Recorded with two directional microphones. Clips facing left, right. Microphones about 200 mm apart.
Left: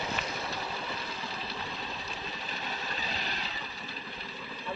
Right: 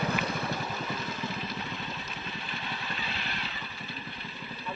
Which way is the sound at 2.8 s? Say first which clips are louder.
Even; 40° left (ahead or behind).